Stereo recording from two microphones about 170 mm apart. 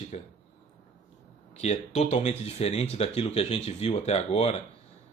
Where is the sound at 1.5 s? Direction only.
40° left (ahead or behind).